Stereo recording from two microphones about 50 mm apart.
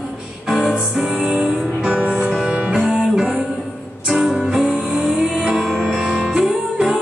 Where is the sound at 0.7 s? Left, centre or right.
Centre.